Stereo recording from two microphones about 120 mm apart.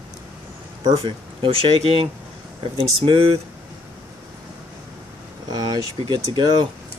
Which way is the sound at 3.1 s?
55° right (ahead or behind).